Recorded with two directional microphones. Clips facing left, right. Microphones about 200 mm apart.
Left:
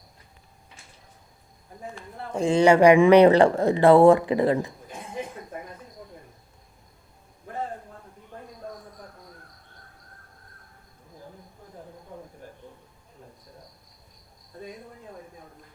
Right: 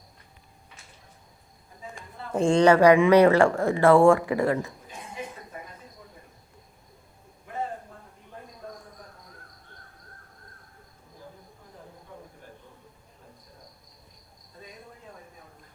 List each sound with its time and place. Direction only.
2.4 s speech: 5° left (ahead or behind)